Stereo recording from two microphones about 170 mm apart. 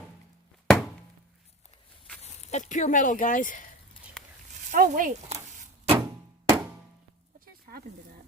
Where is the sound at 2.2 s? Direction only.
40° left (ahead or behind).